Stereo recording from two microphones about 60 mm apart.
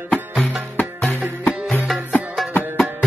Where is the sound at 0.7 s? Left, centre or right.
Left.